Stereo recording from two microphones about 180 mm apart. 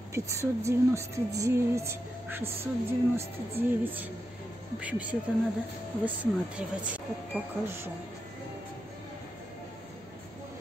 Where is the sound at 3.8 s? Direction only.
10° right (ahead or behind).